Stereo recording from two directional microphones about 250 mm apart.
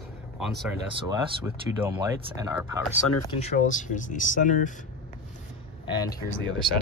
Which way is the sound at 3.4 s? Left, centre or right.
Left.